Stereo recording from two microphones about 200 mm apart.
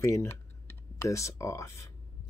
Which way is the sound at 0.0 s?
15° left (ahead or behind).